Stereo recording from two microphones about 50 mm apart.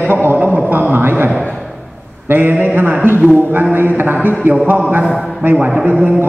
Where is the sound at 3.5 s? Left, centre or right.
Right.